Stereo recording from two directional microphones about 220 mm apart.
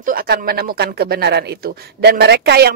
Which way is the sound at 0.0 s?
40° right (ahead or behind).